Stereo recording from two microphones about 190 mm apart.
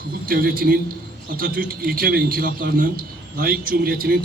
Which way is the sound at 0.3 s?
50° right (ahead or behind).